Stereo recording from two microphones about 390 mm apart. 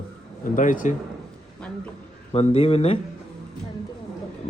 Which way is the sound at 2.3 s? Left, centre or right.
Centre.